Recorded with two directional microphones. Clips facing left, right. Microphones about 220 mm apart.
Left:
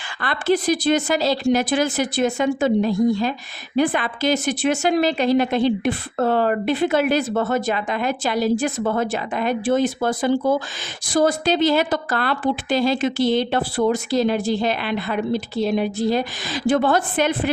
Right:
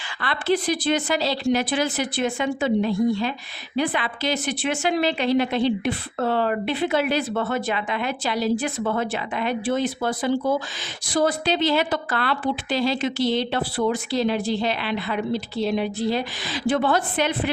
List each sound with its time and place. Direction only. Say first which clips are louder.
0.2 s a woman's voice: left 3 dB; 45° left (ahead or behind)